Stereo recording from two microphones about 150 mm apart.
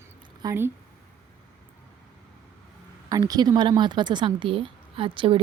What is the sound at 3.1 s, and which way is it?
Speech, 25° right (ahead or behind).